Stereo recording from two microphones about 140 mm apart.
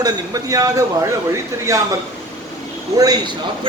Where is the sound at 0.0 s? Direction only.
25° right (ahead or behind).